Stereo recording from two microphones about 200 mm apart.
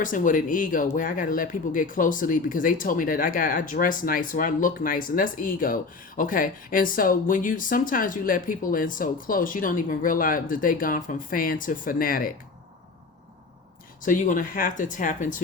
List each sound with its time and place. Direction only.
0.0 s speech: 40° left (ahead or behind)
14.0 s speech: 40° left (ahead or behind)